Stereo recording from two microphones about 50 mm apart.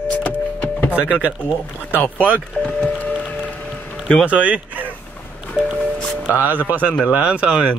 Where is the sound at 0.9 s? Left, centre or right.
Right.